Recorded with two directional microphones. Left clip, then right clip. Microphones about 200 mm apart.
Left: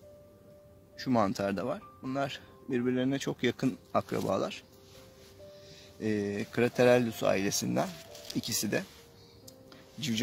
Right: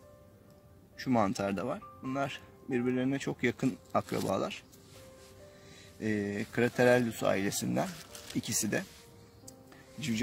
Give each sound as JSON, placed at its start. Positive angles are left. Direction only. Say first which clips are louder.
{"t": 1.0, "sound": "speech", "louder": "left 1 dB", "side_deg": 10}
{"t": 5.9, "sound": "speech", "louder": "left 2 dB", "side_deg": 10}
{"t": 9.9, "sound": "speech", "louder": "left 2 dB", "side_deg": 25}